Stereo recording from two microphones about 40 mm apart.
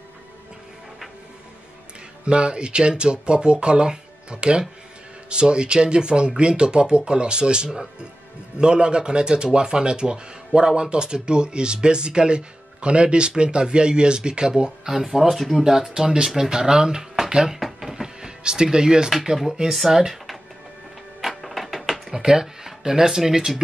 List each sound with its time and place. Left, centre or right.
2.2 s a man's voice: right
14.9 s speech: centre
17.8 s power windows: centre
19.2 s speech: centre
21.2 s music: centre
22.1 s speech: centre